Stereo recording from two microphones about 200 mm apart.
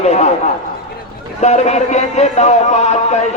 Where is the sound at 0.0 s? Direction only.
35° left (ahead or behind).